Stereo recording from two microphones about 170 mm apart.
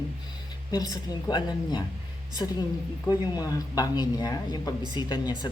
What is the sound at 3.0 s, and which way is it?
Speech, 20° left (ahead or behind).